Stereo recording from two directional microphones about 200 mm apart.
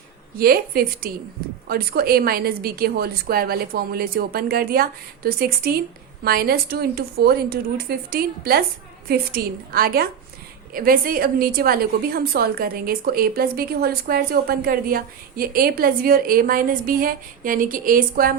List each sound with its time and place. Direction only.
0.3 s a woman's voice: 50° right (ahead or behind)